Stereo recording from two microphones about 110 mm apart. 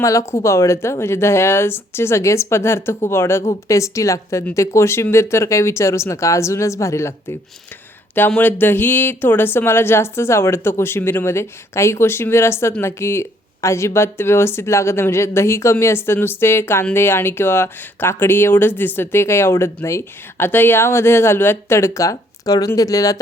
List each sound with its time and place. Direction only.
0.0 s speech: 30° left (ahead or behind)
8.4 s speech: 15° left (ahead or behind)